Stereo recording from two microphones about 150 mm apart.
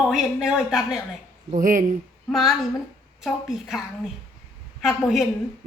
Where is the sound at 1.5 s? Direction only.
60° right (ahead or behind).